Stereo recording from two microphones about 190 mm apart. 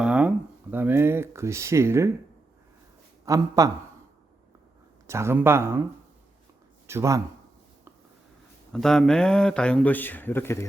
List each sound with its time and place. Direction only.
0.0 s speech: 5° right (ahead or behind)
3.2 s speech: 20° right (ahead or behind)
5.0 s speech: 15° right (ahead or behind)
6.8 s speech: 15° right (ahead or behind)
8.7 s speech: 5° left (ahead or behind)